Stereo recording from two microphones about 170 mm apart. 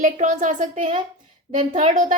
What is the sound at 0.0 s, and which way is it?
A woman's voice, 50° right (ahead or behind).